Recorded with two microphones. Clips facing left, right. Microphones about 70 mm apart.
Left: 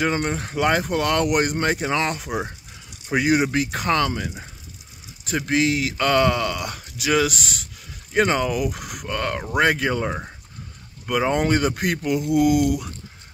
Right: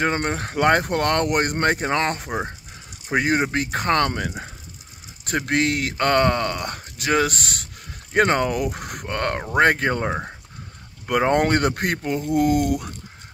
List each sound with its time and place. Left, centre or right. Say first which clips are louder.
0.0 s speech: even; right
11.1 s speech: right 2 dB; right